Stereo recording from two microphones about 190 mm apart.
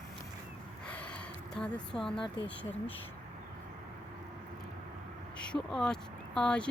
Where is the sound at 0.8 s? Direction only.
5° left (ahead or behind).